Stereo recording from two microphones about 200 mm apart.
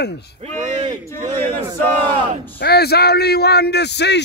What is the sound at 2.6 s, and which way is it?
Speech, 55° left (ahead or behind).